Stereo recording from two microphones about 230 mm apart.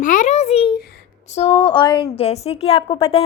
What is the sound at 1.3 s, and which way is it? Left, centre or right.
A woman's voice, left.